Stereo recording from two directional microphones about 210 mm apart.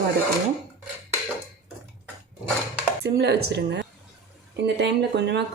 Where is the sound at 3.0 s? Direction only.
50° right (ahead or behind).